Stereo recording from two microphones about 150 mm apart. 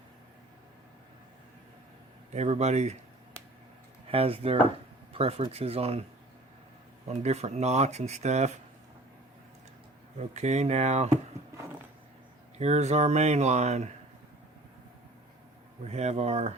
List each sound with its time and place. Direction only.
2.3 s speech: 50° right (ahead or behind)
4.1 s speech: 40° right (ahead or behind)
7.1 s speech: 45° right (ahead or behind)
10.2 s speech: 50° right (ahead or behind)
12.5 s speech: 45° right (ahead or behind)
15.8 s speech: 45° right (ahead or behind)